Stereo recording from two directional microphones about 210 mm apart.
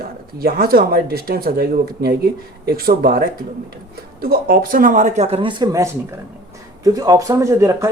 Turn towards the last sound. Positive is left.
turn(degrees=-15)  # may be behind; listen again after turning